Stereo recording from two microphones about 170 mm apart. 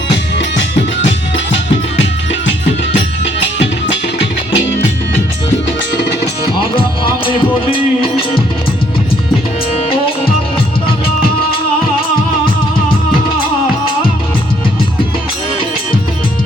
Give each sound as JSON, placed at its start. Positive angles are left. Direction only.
{"t": 3.4, "sound": "music", "side_deg": 90}
{"t": 6.7, "sound": "music", "side_deg": 30}